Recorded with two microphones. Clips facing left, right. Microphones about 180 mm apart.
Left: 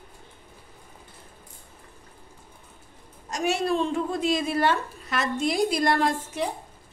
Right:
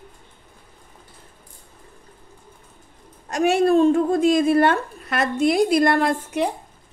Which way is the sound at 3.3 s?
55° right (ahead or behind).